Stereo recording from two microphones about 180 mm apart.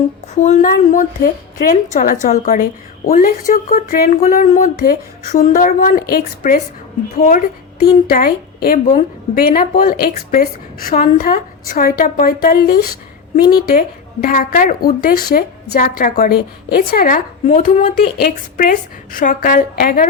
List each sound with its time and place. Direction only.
0.3 s a woman's voice: 45° left (ahead or behind)